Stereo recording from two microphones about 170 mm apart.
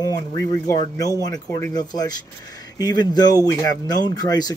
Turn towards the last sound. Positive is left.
turn(degrees=25)  # may be behind; listen again after turning